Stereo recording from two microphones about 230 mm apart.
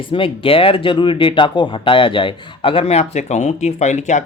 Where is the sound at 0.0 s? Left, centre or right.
Left.